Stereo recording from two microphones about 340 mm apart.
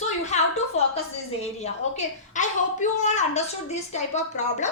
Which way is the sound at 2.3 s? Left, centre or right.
Left.